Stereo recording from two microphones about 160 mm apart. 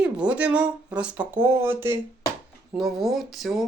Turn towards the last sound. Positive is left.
turn(degrees=0)  # may be behind; listen again after turning